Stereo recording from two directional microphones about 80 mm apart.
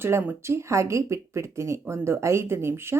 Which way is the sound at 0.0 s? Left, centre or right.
Right.